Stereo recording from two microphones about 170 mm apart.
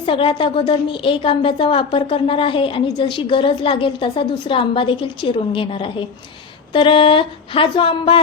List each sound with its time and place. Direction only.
0.0 s a woman's voice: 30° left (ahead or behind)